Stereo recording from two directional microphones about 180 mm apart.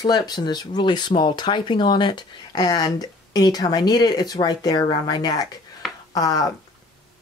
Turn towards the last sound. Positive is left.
turn(degrees=20)  # may be behind; listen again after turning